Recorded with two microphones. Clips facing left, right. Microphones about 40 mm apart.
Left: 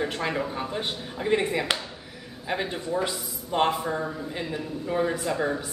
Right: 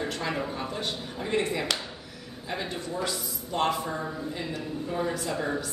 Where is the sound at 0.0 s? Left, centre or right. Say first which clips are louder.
Left 3 dB; centre.